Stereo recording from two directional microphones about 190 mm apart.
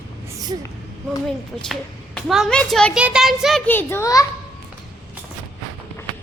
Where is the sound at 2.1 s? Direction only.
Centre (ahead or behind); by 4.2 s 15° left (ahead or behind).